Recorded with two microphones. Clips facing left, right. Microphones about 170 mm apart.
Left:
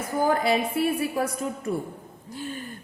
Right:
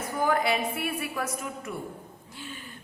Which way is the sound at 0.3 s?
35° left (ahead or behind).